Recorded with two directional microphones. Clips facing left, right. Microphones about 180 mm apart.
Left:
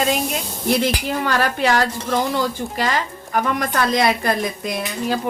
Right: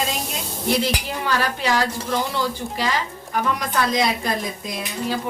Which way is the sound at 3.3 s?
60° left (ahead or behind).